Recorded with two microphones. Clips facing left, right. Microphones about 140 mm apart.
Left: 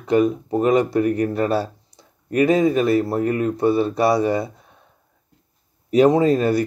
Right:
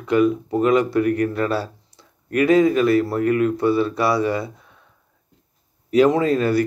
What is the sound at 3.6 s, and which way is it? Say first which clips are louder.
Speech: left 6 dB; 45° left (ahead or behind).